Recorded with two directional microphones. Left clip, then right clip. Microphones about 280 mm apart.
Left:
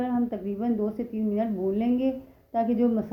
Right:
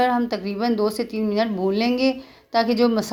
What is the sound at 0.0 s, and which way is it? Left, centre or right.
Speech, right.